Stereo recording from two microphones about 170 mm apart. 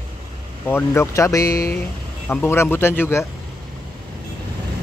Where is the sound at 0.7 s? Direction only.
15° left (ahead or behind).